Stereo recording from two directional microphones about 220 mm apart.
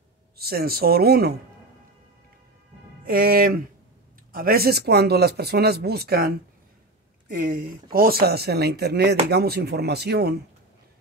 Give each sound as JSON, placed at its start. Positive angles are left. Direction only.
{"t": 0.4, "sound": "speech", "side_deg": -45}
{"t": 3.1, "sound": "speech", "side_deg": -40}